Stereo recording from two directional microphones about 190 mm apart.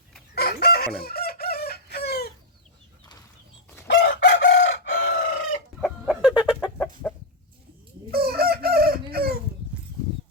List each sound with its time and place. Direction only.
0.3 s chicken: 55° left (ahead or behind)
3.8 s chicken: 50° left (ahead or behind)
5.8 s chicken: 5° right (ahead or behind)
8.1 s chicken: 55° right (ahead or behind)